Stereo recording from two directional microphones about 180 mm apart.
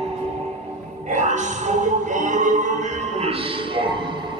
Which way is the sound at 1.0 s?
40° right (ahead or behind).